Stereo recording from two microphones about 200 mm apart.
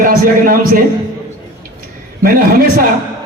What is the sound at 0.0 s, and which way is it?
Speech, 45° right (ahead or behind).